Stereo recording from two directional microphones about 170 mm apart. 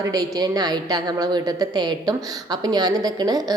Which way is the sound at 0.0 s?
20° right (ahead or behind).